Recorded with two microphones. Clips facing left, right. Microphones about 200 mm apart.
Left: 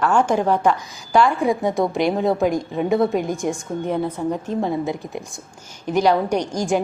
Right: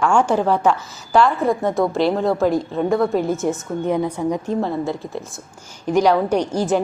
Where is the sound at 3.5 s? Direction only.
10° right (ahead or behind).